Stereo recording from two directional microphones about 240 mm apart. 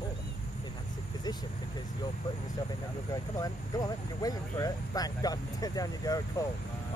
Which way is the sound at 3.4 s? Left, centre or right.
Centre.